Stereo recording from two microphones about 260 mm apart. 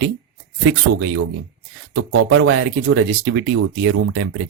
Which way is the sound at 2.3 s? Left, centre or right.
Right.